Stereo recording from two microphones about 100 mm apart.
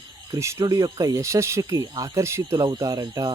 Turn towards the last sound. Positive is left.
turn(degrees=-40)  # may be behind; listen again after turning